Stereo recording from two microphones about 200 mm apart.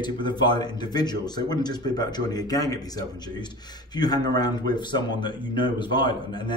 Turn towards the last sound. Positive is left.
turn(degrees=20)  # may be behind; listen again after turning